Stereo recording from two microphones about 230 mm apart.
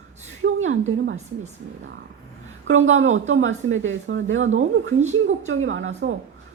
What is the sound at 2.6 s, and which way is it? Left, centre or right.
Speech, right.